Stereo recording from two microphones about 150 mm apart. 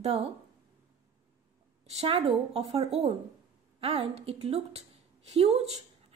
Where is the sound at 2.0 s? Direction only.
40° right (ahead or behind).